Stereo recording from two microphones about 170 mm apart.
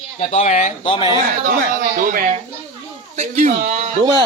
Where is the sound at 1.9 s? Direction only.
55° right (ahead or behind).